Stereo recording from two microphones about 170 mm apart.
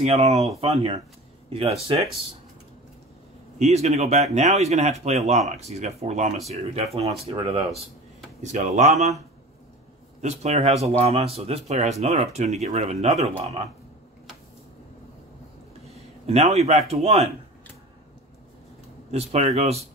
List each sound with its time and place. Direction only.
0.0 s speech: 40° right (ahead or behind)
3.5 s speech: 40° right (ahead or behind)
10.2 s speech: 40° right (ahead or behind)
16.3 s speech: 40° right (ahead or behind)
19.0 s speech: 40° right (ahead or behind)